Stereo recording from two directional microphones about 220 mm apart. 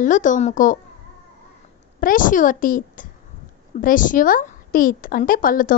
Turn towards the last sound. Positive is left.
turn(degrees=40)  # may be behind; listen again after turning